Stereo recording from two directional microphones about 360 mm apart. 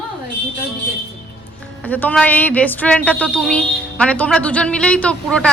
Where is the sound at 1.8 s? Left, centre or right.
Centre.